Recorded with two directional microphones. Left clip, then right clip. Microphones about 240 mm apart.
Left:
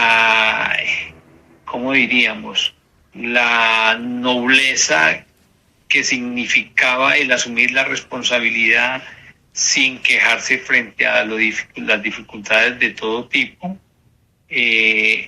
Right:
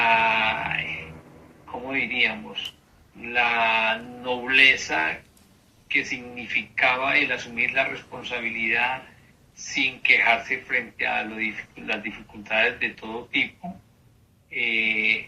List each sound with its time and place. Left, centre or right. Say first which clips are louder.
0.0 s sheep: left 7 dB; left
1.6 s a man's voice: left 11 dB; left